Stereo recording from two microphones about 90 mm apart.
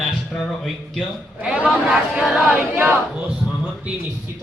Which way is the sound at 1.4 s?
15° right (ahead or behind).